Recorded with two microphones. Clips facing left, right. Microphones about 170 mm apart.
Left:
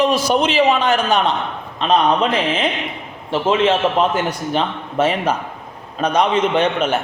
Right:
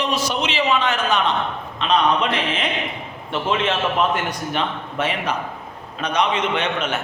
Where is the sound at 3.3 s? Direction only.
30° left (ahead or behind).